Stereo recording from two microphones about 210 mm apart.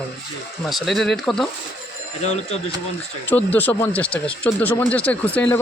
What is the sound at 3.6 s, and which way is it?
Speech, 10° left (ahead or behind).